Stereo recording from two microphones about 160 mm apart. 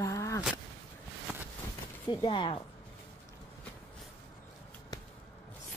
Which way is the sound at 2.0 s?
30° left (ahead or behind).